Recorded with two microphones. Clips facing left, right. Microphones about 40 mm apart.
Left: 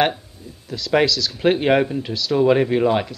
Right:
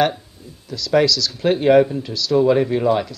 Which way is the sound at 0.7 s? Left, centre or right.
Left.